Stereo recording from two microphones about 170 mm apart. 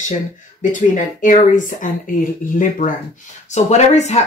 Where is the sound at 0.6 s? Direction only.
45° left (ahead or behind).